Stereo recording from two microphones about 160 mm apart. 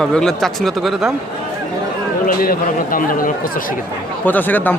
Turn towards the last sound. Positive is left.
turn(degrees=10)  # may be behind; listen again after turning